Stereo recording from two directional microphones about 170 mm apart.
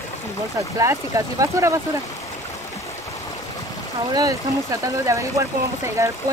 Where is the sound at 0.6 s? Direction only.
20° right (ahead or behind).